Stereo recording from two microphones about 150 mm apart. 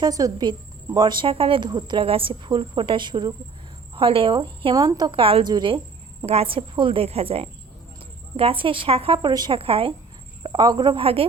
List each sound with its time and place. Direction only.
0.0 s a woman's voice: 25° right (ahead or behind)
6.2 s a woman's voice: 40° right (ahead or behind)